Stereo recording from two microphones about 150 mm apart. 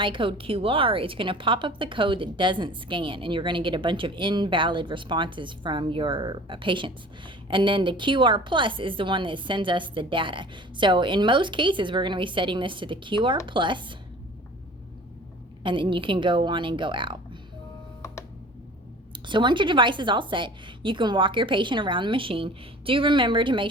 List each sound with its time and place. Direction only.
0.0 s a woman's voice: 35° right (ahead or behind)
15.6 s a woman's voice: 35° right (ahead or behind)
19.3 s a woman's voice: 30° right (ahead or behind)